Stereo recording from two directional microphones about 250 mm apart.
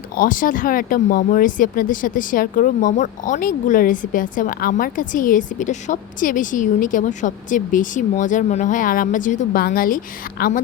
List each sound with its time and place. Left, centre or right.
0.2 s speech: left